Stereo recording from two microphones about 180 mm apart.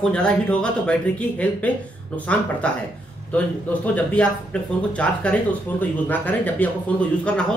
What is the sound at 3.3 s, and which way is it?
Speech, 10° left (ahead or behind).